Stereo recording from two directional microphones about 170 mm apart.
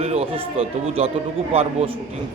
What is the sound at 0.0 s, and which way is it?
A man's voice, 35° right (ahead or behind).